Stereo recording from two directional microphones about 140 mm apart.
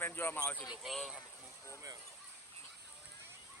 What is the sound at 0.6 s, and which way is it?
Speech, 5° right (ahead or behind).